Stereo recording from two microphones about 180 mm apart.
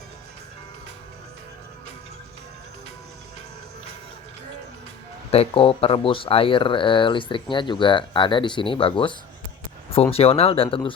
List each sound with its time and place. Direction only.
5.3 s speech: 35° left (ahead or behind)